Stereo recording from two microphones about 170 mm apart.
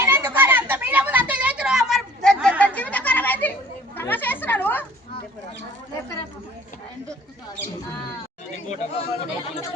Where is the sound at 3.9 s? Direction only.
10° left (ahead or behind).